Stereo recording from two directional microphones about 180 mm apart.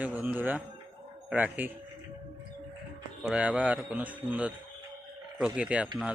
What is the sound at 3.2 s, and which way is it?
A man's voice, 5° right (ahead or behind).